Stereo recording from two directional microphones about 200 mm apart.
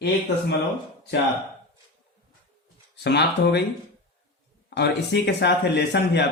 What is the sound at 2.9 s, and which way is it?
Speech, 55° left (ahead or behind).